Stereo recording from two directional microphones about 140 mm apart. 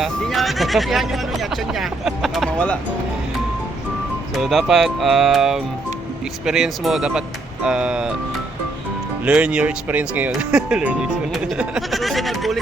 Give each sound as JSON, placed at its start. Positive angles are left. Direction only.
{"t": 0.0, "sound": "speech", "side_deg": 0}
{"t": 4.4, "sound": "speech", "side_deg": 0}
{"t": 9.2, "sound": "speech", "side_deg": -5}